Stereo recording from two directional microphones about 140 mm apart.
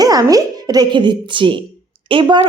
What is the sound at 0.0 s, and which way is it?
Speech, 25° right (ahead or behind).